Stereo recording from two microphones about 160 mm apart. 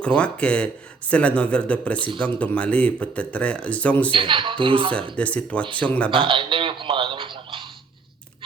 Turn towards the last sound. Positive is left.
turn(degrees=-30)  # may be behind; listen again after turning